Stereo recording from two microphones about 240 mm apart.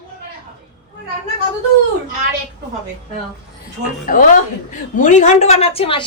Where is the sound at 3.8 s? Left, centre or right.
Right.